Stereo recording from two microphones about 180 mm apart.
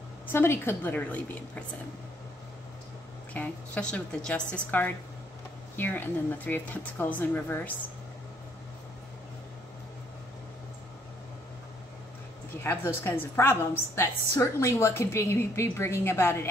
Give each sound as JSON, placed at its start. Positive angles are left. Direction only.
{"t": 0.3, "sound": "a woman's voice", "side_deg": 15}
{"t": 3.3, "sound": "a woman's voice", "side_deg": 5}
{"t": 12.6, "sound": "a woman's voice", "side_deg": 15}